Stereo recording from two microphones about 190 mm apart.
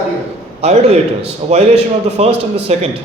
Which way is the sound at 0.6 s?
35° right (ahead or behind).